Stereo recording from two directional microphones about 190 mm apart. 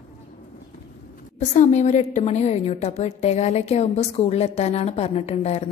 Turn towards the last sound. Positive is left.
turn(degrees=35)  # may be behind; listen again after turning